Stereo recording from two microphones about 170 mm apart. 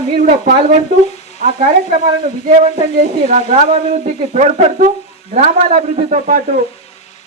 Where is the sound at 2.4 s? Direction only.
45° right (ahead or behind).